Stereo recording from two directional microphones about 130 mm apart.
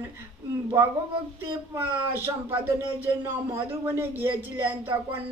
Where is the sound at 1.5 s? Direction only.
20° right (ahead or behind).